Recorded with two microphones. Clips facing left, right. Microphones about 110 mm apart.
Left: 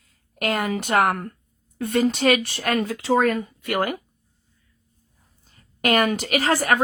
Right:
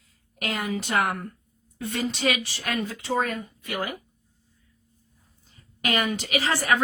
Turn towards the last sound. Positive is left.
turn(degrees=50)  # may be behind; listen again after turning